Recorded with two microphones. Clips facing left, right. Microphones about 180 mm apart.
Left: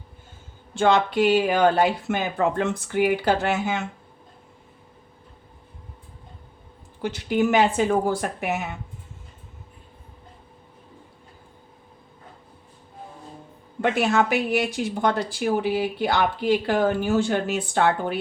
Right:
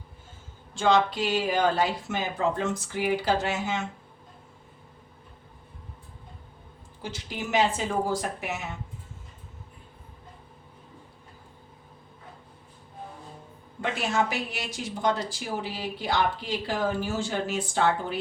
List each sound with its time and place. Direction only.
0.7 s speech: 60° left (ahead or behind)
7.0 s speech: 60° left (ahead or behind)
13.8 s speech: 60° left (ahead or behind)